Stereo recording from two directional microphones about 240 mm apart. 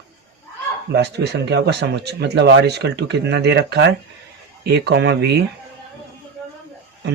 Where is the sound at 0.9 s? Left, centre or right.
Right.